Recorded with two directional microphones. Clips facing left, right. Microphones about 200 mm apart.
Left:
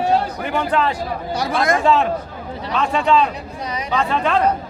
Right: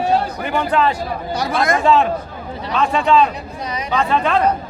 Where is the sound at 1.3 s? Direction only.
30° left (ahead or behind).